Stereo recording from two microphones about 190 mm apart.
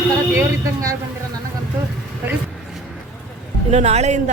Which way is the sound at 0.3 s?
15° right (ahead or behind).